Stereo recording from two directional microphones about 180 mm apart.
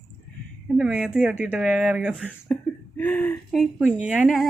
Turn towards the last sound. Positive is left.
turn(degrees=-5)  # may be behind; listen again after turning